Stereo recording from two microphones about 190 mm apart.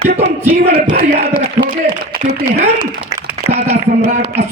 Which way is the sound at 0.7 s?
50° right (ahead or behind).